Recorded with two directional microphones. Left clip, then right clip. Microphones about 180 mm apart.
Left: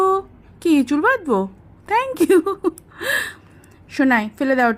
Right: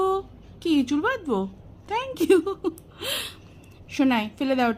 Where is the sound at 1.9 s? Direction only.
35° left (ahead or behind).